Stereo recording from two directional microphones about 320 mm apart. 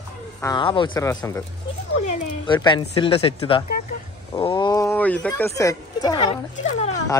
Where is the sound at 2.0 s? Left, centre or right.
Left.